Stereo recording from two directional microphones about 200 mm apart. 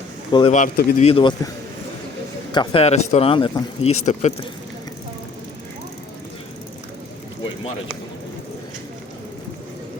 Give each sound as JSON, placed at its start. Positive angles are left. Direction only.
{"t": 0.3, "sound": "speech", "side_deg": 25}
{"t": 0.5, "sound": "a man's voice", "side_deg": 45}
{"t": 1.0, "sound": "a man's voice", "side_deg": 25}
{"t": 2.5, "sound": "a man's voice", "side_deg": 25}